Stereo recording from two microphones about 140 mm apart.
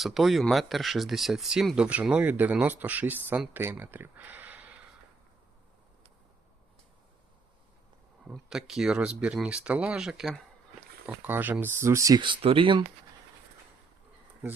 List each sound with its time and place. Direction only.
0.0 s speech: centre (ahead or behind)
8.3 s speech: 5° right (ahead or behind)
11.0 s speech: 10° right (ahead or behind)
12.2 s speech: 40° right (ahead or behind)